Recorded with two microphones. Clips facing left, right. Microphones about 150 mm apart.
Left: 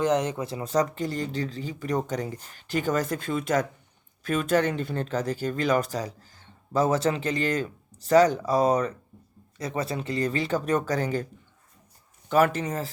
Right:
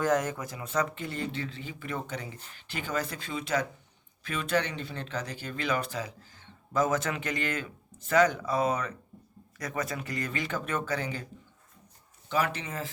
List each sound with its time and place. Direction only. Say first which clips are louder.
0.0 s speech: left 3 dB; 20° left (ahead or behind); by 11.3 s 45° left (ahead or behind)
12.3 s speech: left 8 dB; 50° left (ahead or behind)